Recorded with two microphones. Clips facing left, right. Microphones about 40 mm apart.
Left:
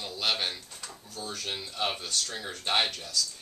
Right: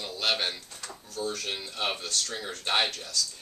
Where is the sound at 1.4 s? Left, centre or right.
Centre.